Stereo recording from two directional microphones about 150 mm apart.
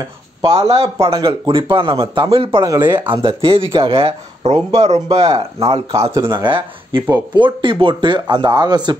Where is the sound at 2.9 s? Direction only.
35° right (ahead or behind).